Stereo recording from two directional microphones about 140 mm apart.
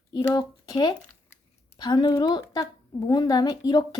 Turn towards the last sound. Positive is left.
turn(degrees=30)  # may be behind; listen again after turning